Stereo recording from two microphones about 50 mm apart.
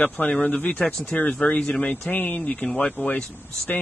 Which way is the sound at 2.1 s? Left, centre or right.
Left.